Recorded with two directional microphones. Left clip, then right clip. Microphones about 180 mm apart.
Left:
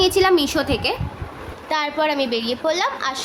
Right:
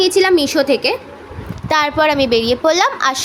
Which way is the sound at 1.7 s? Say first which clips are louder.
Right 7 dB; 35° right (ahead or behind).